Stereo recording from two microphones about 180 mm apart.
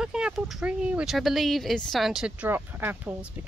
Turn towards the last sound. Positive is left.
turn(degrees=-10)  # may be behind; listen again after turning